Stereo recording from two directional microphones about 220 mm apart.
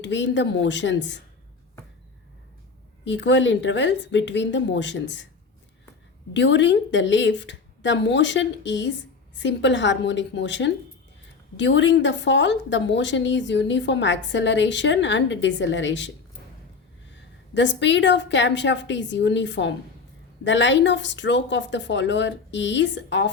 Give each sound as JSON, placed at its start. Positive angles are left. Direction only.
{"t": 0.0, "sound": "a woman's voice", "side_deg": 55}
{"t": 3.0, "sound": "a woman's voice", "side_deg": 55}
{"t": 6.3, "sound": "a woman's voice", "side_deg": 55}